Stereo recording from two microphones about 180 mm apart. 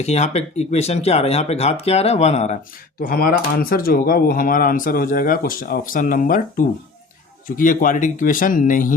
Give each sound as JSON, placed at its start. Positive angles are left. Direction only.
{"t": 0.0, "sound": "speech", "side_deg": 40}
{"t": 3.0, "sound": "speech", "side_deg": 55}